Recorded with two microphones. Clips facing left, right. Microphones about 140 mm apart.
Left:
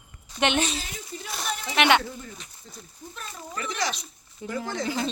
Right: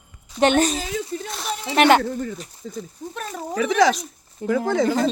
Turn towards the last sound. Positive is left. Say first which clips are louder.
# right 9 dB
turn(degrees=-50)  # may be behind; listen again after turning